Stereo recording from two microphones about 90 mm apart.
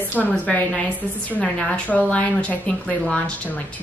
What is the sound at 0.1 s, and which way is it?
Speech, 15° left (ahead or behind).